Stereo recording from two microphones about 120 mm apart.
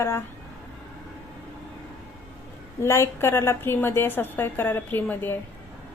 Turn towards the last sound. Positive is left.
turn(degrees=15)  # may be behind; listen again after turning